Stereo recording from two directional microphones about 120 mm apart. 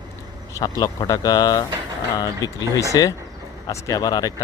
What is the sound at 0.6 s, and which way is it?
Speech, 35° left (ahead or behind).